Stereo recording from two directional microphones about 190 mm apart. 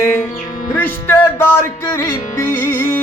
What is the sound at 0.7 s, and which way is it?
Music, 10° left (ahead or behind).